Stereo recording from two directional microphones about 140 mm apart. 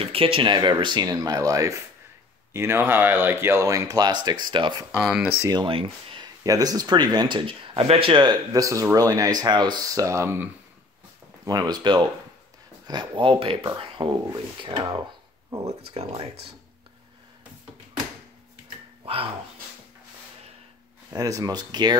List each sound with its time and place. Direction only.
0.0 s speech: 40° right (ahead or behind)
4.9 s speech: 5° right (ahead or behind)
5.4 s speech: 25° right (ahead or behind)
5.7 s speech: 40° right (ahead or behind); by 10.5 s 15° right (ahead or behind)
11.4 s speech: 30° right (ahead or behind)
15.9 s speech: 45° right (ahead or behind)
21.1 s speech: 25° right (ahead or behind)